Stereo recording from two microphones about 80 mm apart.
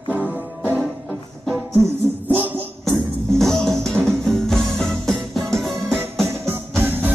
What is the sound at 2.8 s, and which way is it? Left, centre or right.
Music, centre.